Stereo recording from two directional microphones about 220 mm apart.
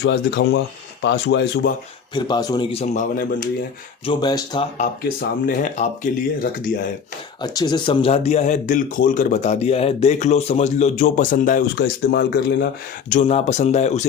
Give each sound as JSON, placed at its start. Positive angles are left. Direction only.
{"t": 0.0, "sound": "speech", "side_deg": 50}
{"t": 2.1, "sound": "speech", "side_deg": 20}
{"t": 2.8, "sound": "speech", "side_deg": 35}
{"t": 4.0, "sound": "speech", "side_deg": 20}
{"t": 4.8, "sound": "speech", "side_deg": 35}
{"t": 7.4, "sound": "speech", "side_deg": 20}
{"t": 13.1, "sound": "speech", "side_deg": 30}